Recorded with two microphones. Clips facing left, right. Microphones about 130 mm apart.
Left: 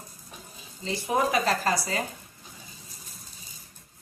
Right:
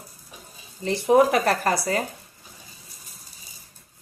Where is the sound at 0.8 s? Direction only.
65° right (ahead or behind).